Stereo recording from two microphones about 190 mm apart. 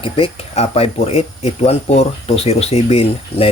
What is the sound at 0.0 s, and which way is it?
Speech, 30° left (ahead or behind).